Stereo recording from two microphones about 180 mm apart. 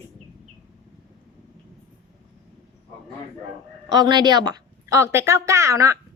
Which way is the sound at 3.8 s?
25° right (ahead or behind).